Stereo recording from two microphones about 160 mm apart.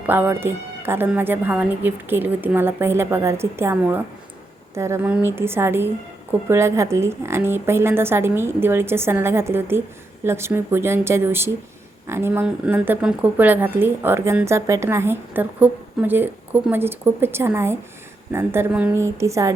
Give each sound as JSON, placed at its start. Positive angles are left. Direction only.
{"t": 0.1, "sound": "a woman's voice", "side_deg": -15}